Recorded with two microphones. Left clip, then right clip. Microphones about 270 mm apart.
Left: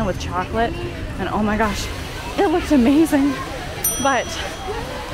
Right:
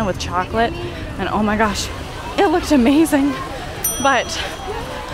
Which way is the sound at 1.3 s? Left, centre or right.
Right.